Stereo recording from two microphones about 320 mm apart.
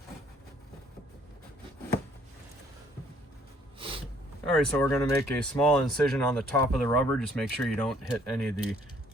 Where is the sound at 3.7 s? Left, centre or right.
Centre.